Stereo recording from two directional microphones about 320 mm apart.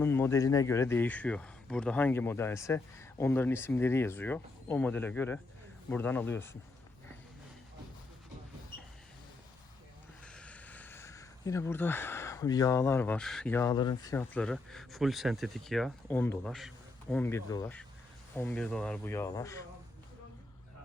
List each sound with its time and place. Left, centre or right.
0.0 s speech: centre
10.2 s speech: centre